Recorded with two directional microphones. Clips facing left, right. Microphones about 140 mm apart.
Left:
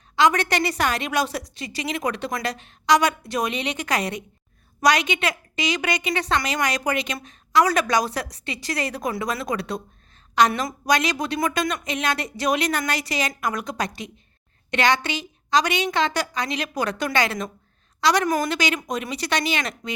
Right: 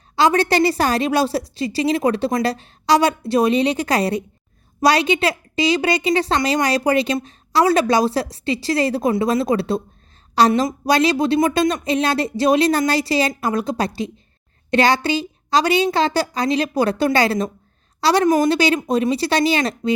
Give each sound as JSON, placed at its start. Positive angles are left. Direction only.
{"t": 0.2, "sound": "a woman's voice", "side_deg": -30}